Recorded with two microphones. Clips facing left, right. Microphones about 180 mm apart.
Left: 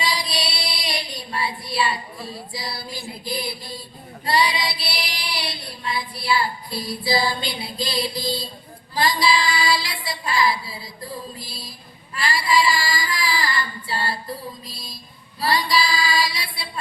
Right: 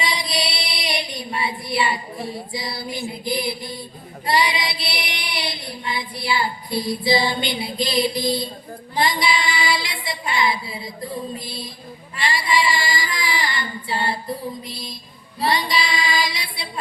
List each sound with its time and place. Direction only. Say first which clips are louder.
0.0 s child singing: right 1 dB; 25° right (ahead or behind)
6.2 s music: left 1 dB; 25° right (ahead or behind)
9.0 s child singing: left 1 dB; 20° right (ahead or behind)
11.4 s music: right 6 dB; 25° right (ahead or behind)
12.1 s female singing: left 1 dB; 20° right (ahead or behind)
15.4 s music: even; 25° right (ahead or behind)